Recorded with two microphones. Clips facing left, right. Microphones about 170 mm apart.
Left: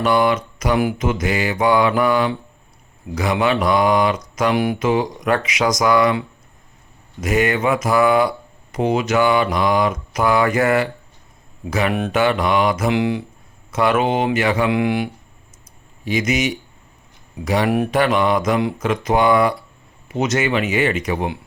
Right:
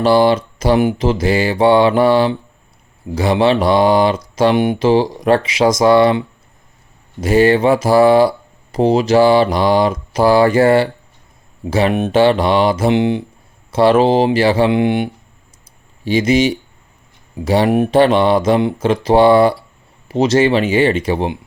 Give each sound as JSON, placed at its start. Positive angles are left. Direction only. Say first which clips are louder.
{"t": 0.0, "sound": "mantra", "louder": "right 5 dB", "side_deg": -30}